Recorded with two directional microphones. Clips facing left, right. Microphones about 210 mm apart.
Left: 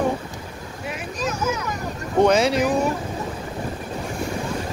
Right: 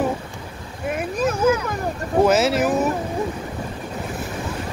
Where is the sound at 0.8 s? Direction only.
55° right (ahead or behind).